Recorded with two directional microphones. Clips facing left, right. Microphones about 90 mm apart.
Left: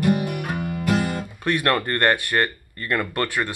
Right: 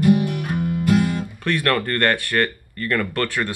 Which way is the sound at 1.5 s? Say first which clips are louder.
Even; 20° left (ahead or behind).